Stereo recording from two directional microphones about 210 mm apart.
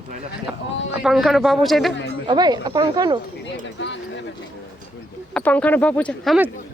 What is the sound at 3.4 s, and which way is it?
Speech, 60° left (ahead or behind).